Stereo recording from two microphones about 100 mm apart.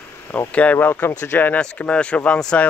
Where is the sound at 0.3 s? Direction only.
15° left (ahead or behind).